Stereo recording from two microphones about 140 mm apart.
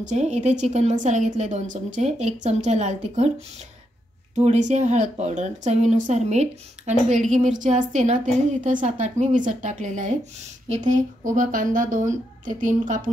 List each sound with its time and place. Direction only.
0.0 s speech: 55° right (ahead or behind)
4.4 s a woman's voice: 55° right (ahead or behind)